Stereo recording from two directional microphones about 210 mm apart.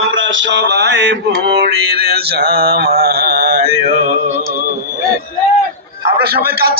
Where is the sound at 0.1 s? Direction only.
65° right (ahead or behind); by 3.6 s 45° right (ahead or behind).